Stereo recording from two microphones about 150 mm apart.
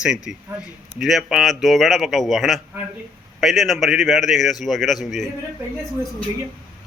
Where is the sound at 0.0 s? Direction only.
5° right (ahead or behind).